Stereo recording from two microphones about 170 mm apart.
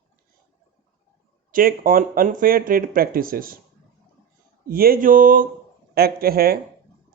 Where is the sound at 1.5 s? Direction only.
55° right (ahead or behind).